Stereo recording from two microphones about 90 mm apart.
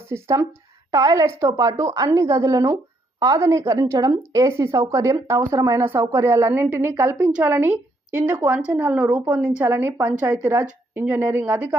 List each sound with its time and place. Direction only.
0.1 s a woman's voice: 35° right (ahead or behind); by 11.8 s 20° right (ahead or behind)